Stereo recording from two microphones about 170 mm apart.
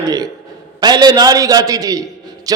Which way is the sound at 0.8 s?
25° right (ahead or behind).